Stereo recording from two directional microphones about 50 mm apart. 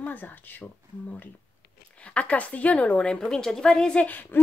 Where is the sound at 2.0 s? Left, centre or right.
Left.